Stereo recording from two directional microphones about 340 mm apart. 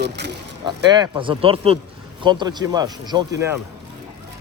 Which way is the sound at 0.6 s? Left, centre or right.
Centre.